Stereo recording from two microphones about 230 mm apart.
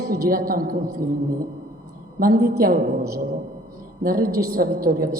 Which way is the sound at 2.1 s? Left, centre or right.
Right.